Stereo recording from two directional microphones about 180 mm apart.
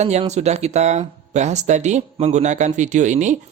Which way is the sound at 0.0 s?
40° right (ahead or behind).